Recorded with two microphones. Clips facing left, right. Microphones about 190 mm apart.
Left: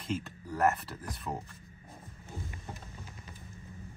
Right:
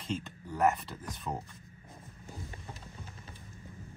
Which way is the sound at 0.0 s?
5° left (ahead or behind).